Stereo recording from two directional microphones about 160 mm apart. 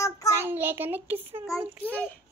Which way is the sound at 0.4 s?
15° right (ahead or behind).